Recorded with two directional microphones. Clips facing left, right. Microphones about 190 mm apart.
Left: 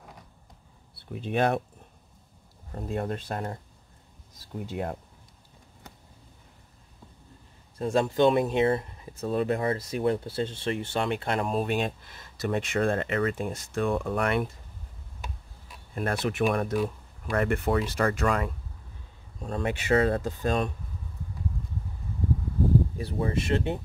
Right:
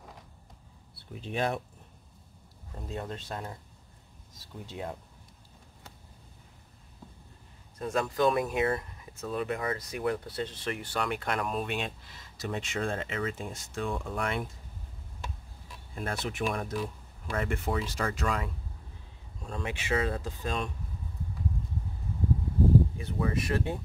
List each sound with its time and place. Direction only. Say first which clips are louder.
1.2 s speech: left 6 dB; 60° left (ahead or behind)
2.7 s speech: left 7 dB; 55° left (ahead or behind)
4.6 s speech: left 5 dB; 55° left (ahead or behind)
7.8 s speech: left 5 dB; 25° left (ahead or behind)
11.6 s speech: left 6 dB; 45° left (ahead or behind); by 14.5 s 60° left (ahead or behind)
15.9 s speech: left 6 dB; 60° left (ahead or behind)
19.4 s speech: left 6 dB; 45° left (ahead or behind)
22.9 s speech: left 2 dB; 30° left (ahead or behind)